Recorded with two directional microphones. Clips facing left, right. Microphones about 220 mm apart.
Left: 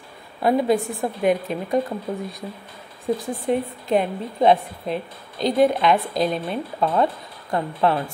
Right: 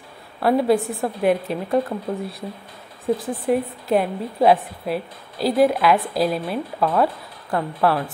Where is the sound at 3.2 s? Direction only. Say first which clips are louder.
Right 2 dB; 5° right (ahead or behind).